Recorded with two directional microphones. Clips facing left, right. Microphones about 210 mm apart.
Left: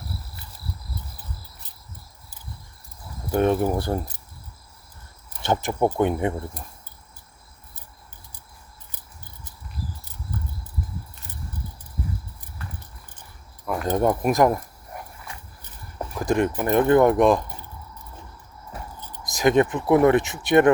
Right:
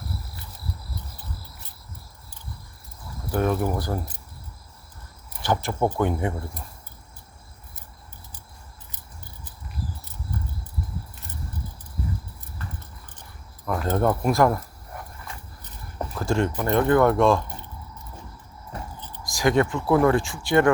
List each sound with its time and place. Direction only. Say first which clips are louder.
3.3 s speech: left 3 dB; 25° left (ahead or behind)
5.4 s speech: left 2 dB; 20° left (ahead or behind)
13.8 s speech: left 1 dB; 15° left (ahead or behind)
14.9 s a sound: even; 15° left (ahead or behind)
16.7 s speech: left 2 dB; 20° left (ahead or behind)
18.9 s speech: left 1 dB; 10° left (ahead or behind)